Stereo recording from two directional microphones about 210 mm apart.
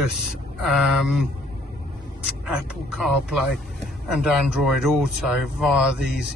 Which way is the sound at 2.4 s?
Centre (ahead or behind).